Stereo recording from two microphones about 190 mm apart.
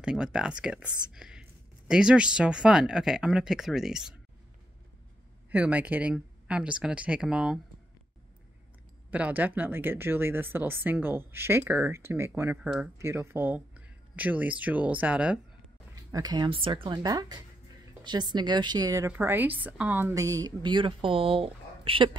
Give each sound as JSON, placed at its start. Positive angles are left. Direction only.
{"t": 0.0, "sound": "speech", "side_deg": -5}
{"t": 5.5, "sound": "speech", "side_deg": -10}
{"t": 9.1, "sound": "speech", "side_deg": -10}
{"t": 16.1, "sound": "a woman's voice", "side_deg": -20}